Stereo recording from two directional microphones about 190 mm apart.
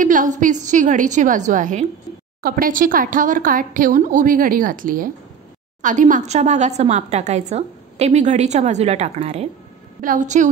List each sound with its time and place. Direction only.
0.0 s a woman's voice: 45° right (ahead or behind)